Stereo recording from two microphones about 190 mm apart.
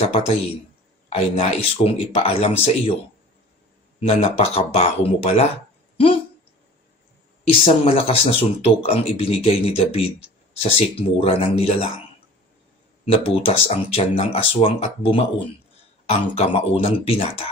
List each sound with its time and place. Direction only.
1.1 s speech: 30° left (ahead or behind)
4.0 s speech: 30° left (ahead or behind)
7.5 s speech: 30° left (ahead or behind)
13.1 s speech: 30° left (ahead or behind)